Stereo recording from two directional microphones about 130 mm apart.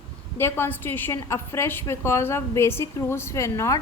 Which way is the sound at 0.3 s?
20° left (ahead or behind).